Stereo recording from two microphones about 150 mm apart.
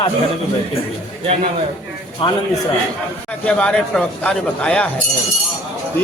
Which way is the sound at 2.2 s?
35° left (ahead or behind).